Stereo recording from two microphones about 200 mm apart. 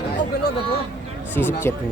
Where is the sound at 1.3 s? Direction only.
10° left (ahead or behind).